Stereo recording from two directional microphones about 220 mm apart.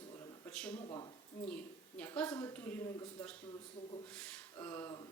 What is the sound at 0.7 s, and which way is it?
Speech, 25° left (ahead or behind).